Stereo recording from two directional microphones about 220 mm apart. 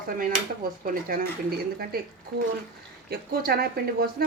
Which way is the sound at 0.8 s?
40° right (ahead or behind).